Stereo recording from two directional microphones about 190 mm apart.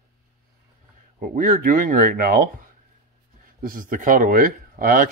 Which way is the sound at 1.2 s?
45° right (ahead or behind).